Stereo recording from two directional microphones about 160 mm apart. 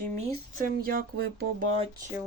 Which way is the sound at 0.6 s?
65° right (ahead or behind).